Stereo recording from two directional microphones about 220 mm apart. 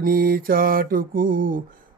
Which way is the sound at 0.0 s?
40° right (ahead or behind).